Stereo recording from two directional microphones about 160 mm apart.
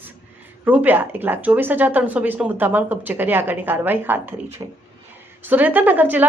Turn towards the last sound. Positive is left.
turn(degrees=-10)  # may be behind; listen again after turning